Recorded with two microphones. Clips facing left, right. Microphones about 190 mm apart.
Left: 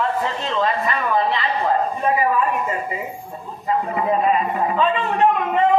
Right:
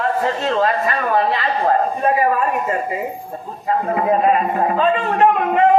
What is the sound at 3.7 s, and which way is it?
A man's voice, 45° right (ahead or behind).